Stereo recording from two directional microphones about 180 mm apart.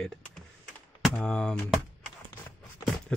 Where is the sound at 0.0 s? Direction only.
5° left (ahead or behind).